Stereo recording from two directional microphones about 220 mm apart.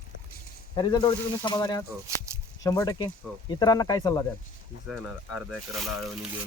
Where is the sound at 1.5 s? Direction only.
15° left (ahead or behind).